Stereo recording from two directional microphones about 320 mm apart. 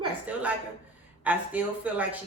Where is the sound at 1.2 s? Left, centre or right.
Centre.